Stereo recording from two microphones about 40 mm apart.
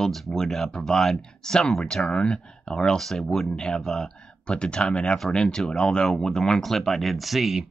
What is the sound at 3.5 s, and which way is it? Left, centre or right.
Speech, left.